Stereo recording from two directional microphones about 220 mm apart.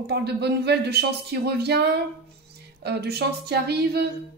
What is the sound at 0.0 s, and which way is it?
Speech, 50° right (ahead or behind).